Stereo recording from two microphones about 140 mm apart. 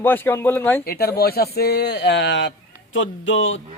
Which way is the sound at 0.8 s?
90° left.